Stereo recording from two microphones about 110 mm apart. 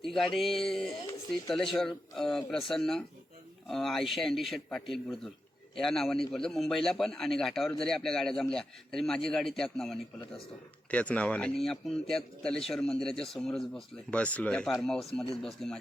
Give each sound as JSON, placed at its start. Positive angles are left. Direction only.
{"t": 0.0, "sound": "a man's voice", "side_deg": 5}